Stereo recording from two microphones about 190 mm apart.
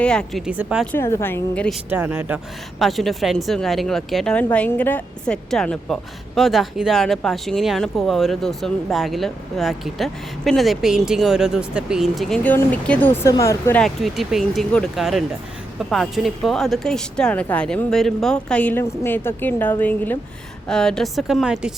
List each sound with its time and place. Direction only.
0.0 s a woman's voice: 5° left (ahead or behind)
0.9 s speech: 15° left (ahead or behind)
1.9 s a woman's voice: 10° right (ahead or behind); by 13.8 s 15° left (ahead or behind)
13.8 s a woman's voice: centre (ahead or behind)